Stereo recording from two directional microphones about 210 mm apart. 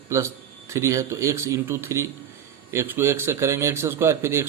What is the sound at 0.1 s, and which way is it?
Speech, 15° right (ahead or behind).